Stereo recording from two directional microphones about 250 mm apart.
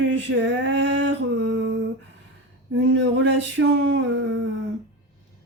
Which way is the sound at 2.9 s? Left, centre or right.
Right.